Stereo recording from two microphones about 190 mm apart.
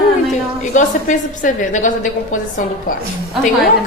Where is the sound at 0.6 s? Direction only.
40° left (ahead or behind).